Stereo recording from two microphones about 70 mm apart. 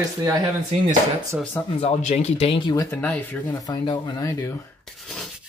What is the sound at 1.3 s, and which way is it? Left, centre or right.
Speech, right.